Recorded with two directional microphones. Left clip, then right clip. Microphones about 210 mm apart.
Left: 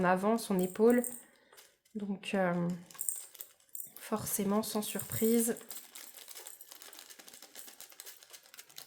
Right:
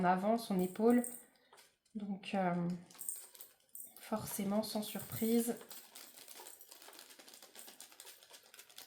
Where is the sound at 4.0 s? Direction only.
45° left (ahead or behind).